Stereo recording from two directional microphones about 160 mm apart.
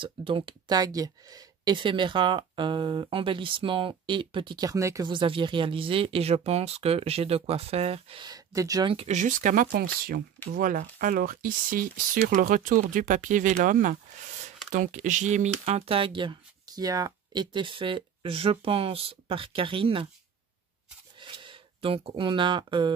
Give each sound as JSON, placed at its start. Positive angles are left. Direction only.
{"t": 0.0, "sound": "speech", "side_deg": -35}
{"t": 8.2, "sound": "speech", "side_deg": -25}
{"t": 8.9, "sound": "speech", "side_deg": -45}
{"t": 21.2, "sound": "speech", "side_deg": -30}